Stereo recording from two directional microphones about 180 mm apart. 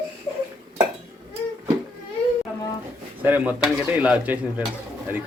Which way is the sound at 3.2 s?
10° right (ahead or behind).